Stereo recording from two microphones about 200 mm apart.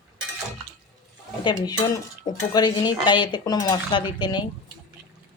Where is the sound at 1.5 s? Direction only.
20° left (ahead or behind).